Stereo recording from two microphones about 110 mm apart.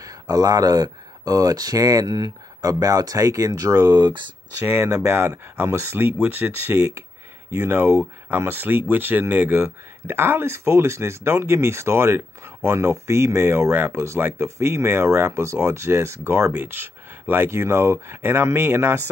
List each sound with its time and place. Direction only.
0.0 s speech: 35° right (ahead or behind)
3.9 s speech: 45° right (ahead or behind)
4.6 s speech: 25° right (ahead or behind)